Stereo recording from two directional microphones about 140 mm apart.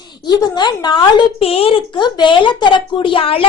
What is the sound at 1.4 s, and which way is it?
Speech, 45° left (ahead or behind).